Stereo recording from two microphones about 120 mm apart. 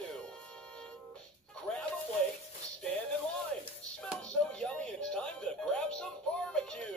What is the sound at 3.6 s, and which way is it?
Music, 10° left (ahead or behind).